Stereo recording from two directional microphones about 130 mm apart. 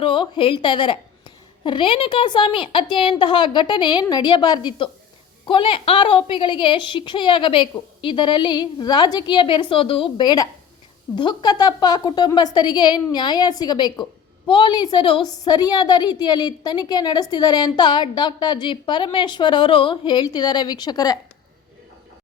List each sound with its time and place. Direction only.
0.0 s a woman's voice: 40° left (ahead or behind)